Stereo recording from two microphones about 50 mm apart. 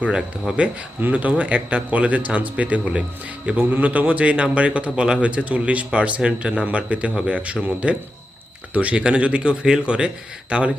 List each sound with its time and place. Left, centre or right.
0.0 s speech: right